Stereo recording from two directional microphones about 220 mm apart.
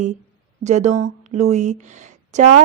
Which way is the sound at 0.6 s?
30° right (ahead or behind).